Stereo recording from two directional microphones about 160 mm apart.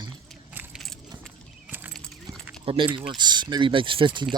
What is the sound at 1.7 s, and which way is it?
Clip-clop, 10° right (ahead or behind).